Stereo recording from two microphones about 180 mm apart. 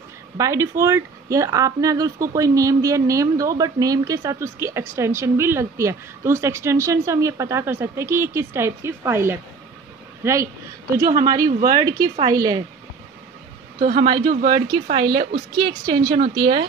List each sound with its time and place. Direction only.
0.4 s speech: 15° right (ahead or behind)
13.7 s a woman's voice: 45° right (ahead or behind)
14.4 s speech: 25° right (ahead or behind)